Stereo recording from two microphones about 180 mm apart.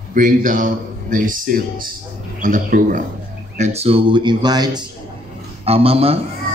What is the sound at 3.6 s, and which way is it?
Speech, 35° right (ahead or behind).